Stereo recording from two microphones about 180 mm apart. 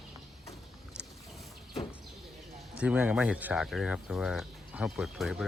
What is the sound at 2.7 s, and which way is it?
Speech, 5° right (ahead or behind).